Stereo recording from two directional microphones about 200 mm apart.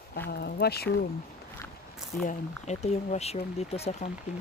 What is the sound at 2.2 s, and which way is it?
Speech, 35° left (ahead or behind).